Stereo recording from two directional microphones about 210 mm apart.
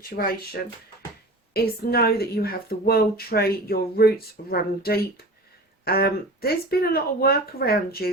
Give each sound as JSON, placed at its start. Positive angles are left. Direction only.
{"t": 1.5, "sound": "speech", "side_deg": 45}